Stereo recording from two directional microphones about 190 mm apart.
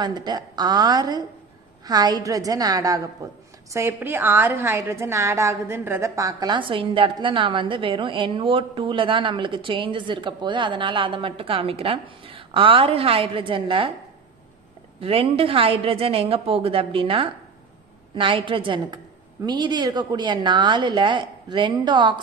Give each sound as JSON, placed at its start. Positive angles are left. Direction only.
{"t": 0.0, "sound": "a woman's voice", "side_deg": -20}
{"t": 15.0, "sound": "a woman's voice", "side_deg": -30}